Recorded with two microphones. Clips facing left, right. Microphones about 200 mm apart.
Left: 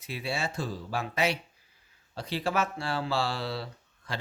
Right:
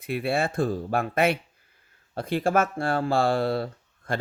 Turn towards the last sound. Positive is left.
turn(degrees=-50)  # may be behind; listen again after turning